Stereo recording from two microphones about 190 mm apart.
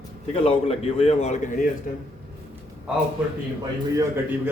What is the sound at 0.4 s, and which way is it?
A man's voice, 30° left (ahead or behind).